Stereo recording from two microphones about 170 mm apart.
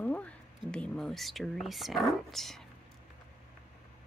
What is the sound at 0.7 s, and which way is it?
Speech, 5° left (ahead or behind).